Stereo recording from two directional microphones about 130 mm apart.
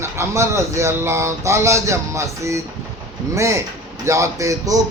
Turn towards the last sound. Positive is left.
turn(degrees=-25)  # may be behind; listen again after turning